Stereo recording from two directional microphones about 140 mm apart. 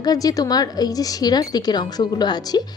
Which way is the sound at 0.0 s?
25° left (ahead or behind).